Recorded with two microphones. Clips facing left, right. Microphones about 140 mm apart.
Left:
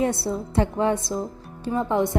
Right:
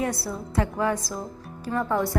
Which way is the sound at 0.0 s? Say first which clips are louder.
Left 4 dB; 25° left (ahead or behind).